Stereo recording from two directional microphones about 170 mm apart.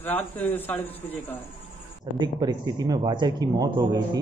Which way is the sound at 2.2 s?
25° right (ahead or behind).